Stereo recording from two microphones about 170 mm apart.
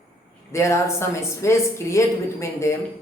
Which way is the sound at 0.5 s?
15° left (ahead or behind).